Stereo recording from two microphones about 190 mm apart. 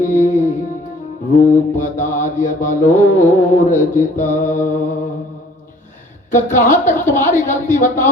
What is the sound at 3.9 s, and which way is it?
Speech, 45° left (ahead or behind).